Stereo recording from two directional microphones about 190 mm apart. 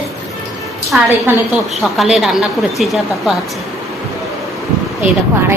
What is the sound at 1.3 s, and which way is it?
Speech, 10° right (ahead or behind).